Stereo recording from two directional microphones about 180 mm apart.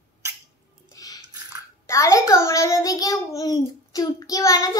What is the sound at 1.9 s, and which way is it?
A child's voice, 15° left (ahead or behind).